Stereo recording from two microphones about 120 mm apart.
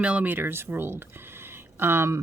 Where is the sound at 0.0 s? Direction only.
10° right (ahead or behind).